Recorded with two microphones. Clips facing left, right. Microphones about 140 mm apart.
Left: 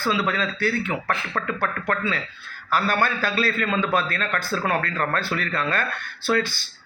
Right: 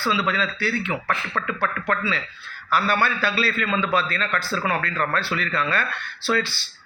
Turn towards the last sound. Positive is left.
turn(degrees=45)  # may be behind; listen again after turning